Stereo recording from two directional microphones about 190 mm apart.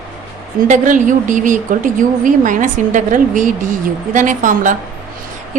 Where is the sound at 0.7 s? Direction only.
40° right (ahead or behind).